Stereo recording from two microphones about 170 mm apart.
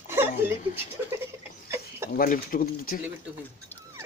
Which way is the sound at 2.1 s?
55° left (ahead or behind).